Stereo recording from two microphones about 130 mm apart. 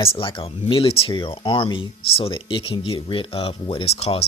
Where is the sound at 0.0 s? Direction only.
45° left (ahead or behind).